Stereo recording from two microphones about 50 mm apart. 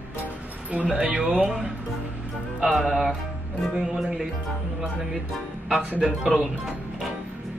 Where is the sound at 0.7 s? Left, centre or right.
Right.